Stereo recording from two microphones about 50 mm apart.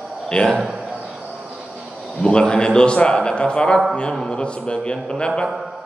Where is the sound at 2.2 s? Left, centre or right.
Centre.